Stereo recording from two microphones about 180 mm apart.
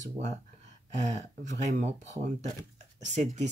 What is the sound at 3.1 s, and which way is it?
Speech, 40° right (ahead or behind).